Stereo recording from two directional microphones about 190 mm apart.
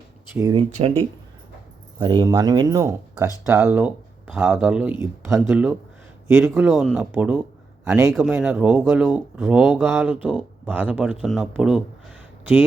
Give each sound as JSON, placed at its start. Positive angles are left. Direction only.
{"t": 0.5, "sound": "speech", "side_deg": -30}